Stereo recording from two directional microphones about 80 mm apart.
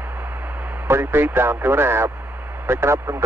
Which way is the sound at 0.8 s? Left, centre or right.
Right.